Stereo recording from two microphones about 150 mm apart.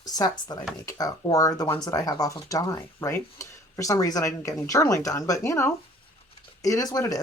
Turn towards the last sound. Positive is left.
turn(degrees=25)  # may be behind; listen again after turning